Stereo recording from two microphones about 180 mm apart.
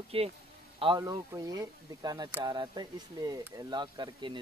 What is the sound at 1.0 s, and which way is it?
Speech, 20° right (ahead or behind).